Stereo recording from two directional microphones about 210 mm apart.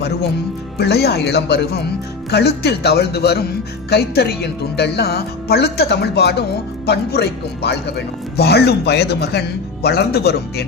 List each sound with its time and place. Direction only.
0.8 s a man's voice: 50° left (ahead or behind)